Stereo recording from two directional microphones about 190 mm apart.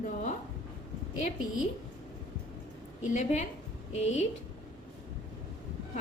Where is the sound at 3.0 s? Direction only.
40° left (ahead or behind).